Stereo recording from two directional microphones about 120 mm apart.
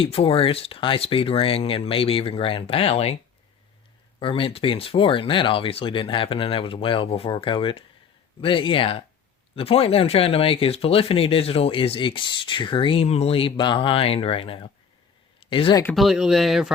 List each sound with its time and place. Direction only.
0.0 s speech: 50° left (ahead or behind)
4.2 s speech: 50° left (ahead or behind)
15.4 s a sound: 45° left (ahead or behind)
16.0 s speech: 5° right (ahead or behind)